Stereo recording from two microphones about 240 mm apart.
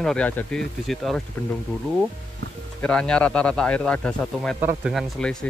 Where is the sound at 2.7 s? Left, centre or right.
Centre.